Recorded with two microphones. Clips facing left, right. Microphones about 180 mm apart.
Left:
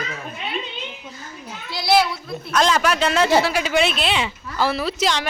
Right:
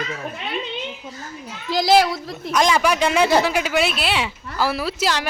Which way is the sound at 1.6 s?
90° right.